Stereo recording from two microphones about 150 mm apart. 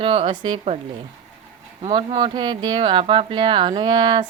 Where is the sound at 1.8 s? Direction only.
35° right (ahead or behind).